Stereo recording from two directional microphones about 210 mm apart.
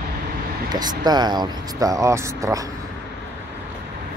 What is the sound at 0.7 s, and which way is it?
Speech, 20° right (ahead or behind).